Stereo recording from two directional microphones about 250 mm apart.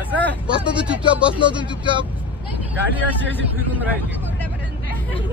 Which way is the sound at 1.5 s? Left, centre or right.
Centre.